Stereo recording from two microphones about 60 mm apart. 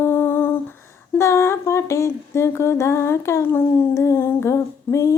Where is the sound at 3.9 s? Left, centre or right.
Left.